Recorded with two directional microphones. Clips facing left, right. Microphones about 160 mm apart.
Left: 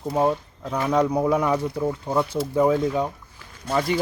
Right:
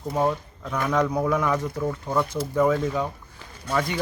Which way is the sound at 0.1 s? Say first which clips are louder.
Left 2 dB; 15° left (ahead or behind).